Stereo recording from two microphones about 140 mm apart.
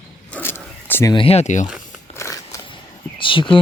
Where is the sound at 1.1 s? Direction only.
40° left (ahead or behind); by 1.7 s 60° left (ahead or behind).